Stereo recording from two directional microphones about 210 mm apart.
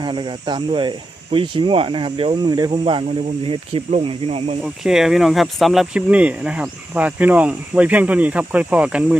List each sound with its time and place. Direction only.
0.0 s speech: 20° right (ahead or behind)
4.6 s speech: centre (ahead or behind)